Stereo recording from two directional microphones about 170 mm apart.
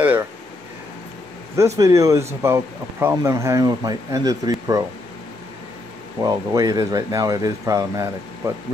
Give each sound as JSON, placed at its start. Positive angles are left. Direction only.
{"t": 0.0, "sound": "a sound", "side_deg": -10}
{"t": 1.8, "sound": "speech", "side_deg": -20}
{"t": 6.2, "sound": "speech", "side_deg": -20}